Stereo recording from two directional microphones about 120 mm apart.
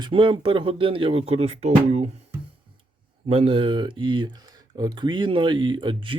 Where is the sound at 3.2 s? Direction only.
55° right (ahead or behind).